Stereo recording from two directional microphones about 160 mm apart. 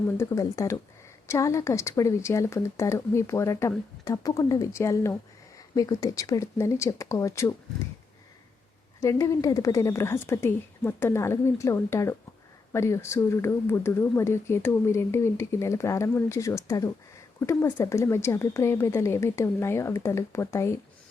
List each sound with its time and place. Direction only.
0.2 s speech: 20° left (ahead or behind)
9.0 s speech: 20° left (ahead or behind)